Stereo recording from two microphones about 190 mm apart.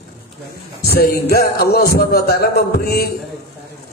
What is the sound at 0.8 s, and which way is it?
A man's voice, 55° left (ahead or behind).